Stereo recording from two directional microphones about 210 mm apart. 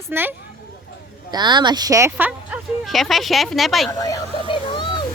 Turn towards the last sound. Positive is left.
turn(degrees=25)  # may be behind; listen again after turning